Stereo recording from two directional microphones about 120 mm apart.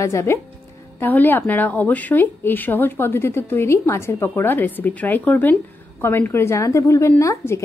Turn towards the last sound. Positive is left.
turn(degrees=25)  # may be behind; listen again after turning